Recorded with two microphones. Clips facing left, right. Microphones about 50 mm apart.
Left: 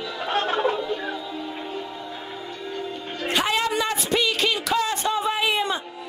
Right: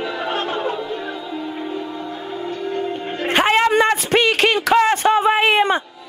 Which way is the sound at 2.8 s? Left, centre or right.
Right.